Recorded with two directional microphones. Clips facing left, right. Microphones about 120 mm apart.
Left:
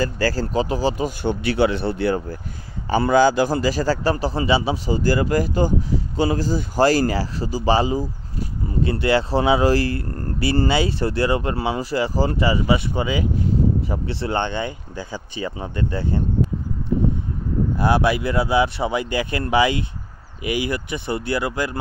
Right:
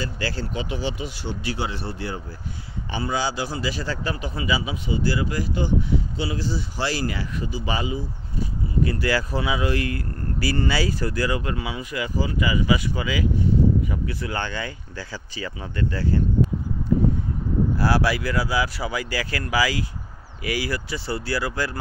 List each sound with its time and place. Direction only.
0.0 s speech: 40° left (ahead or behind); by 2.2 s 65° left (ahead or behind)
3.0 s a man's voice: 50° left (ahead or behind)
8.8 s speech: 25° left (ahead or behind)
9.4 s a man's voice: 35° left (ahead or behind)
17.7 s speech: 20° left (ahead or behind)